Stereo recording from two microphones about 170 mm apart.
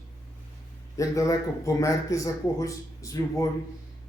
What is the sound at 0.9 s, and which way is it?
Speech, 20° left (ahead or behind).